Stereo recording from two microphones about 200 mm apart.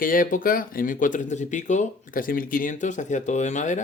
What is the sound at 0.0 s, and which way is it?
Speech, 45° left (ahead or behind).